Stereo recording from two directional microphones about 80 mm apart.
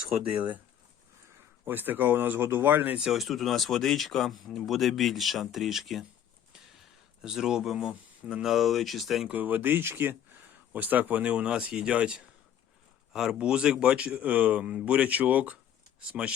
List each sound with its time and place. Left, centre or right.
0.3 s speech: centre
1.6 s speech: right
3.0 s speech: centre
7.2 s speech: centre
9.3 s a man's voice: right